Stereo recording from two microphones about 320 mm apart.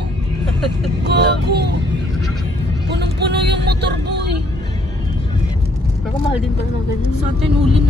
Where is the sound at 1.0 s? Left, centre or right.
Right.